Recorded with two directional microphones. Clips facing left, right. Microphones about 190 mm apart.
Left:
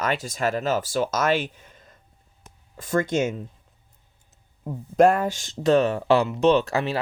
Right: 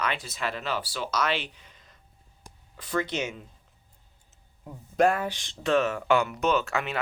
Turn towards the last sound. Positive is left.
turn(degrees=35)  # may be behind; listen again after turning